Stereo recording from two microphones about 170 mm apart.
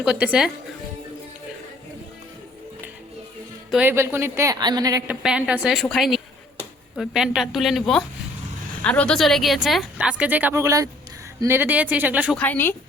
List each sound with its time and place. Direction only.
0.0 s a woman's voice: 5° right (ahead or behind)
3.7 s a woman's voice: 10° right (ahead or behind)
5.0 s a woman's voice: 5° right (ahead or behind)
12.4 s a woman's voice: 10° left (ahead or behind)